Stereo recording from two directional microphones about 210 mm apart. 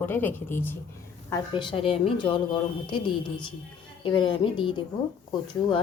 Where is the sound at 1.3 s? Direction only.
20° left (ahead or behind).